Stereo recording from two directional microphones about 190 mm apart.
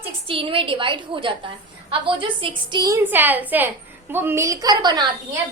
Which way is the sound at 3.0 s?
10° right (ahead or behind).